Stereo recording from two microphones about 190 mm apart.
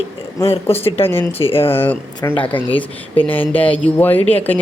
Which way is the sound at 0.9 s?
30° left (ahead or behind).